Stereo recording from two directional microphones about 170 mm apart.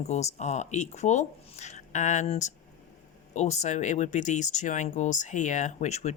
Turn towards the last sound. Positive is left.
turn(degrees=40)  # may be behind; listen again after turning